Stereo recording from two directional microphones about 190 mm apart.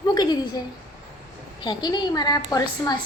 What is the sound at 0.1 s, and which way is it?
Speech, 20° left (ahead or behind).